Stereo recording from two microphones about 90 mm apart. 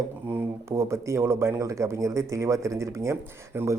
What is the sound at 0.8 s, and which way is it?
A man's voice, 35° right (ahead or behind).